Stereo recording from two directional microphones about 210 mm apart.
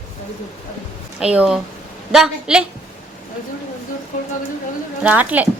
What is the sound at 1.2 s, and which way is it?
Speech, 5° right (ahead or behind).